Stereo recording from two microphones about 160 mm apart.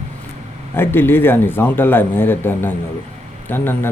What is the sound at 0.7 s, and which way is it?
A man's voice, 15° left (ahead or behind).